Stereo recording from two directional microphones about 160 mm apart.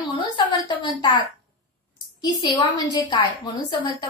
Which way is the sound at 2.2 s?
25° left (ahead or behind).